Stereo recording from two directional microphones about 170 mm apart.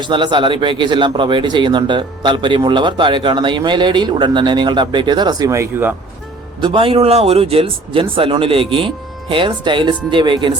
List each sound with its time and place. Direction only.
0.0 s a man's voice: 25° right (ahead or behind)
6.6 s a man's voice: 30° right (ahead or behind)